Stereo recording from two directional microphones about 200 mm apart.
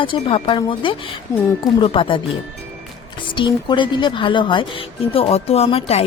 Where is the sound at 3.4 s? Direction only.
25° left (ahead or behind).